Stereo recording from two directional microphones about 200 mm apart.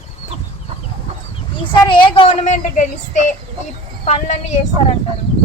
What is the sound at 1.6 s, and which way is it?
A child's voice, 25° left (ahead or behind).